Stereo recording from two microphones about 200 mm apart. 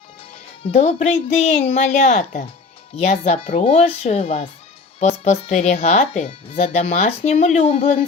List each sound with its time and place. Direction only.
0.6 s speech: 30° left (ahead or behind)